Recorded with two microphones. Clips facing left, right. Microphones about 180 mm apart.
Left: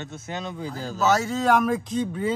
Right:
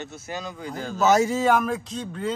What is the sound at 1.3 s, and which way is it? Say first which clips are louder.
Speech: even; centre (ahead or behind).